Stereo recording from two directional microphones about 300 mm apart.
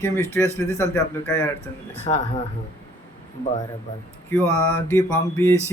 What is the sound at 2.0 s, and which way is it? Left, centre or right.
Speech, left.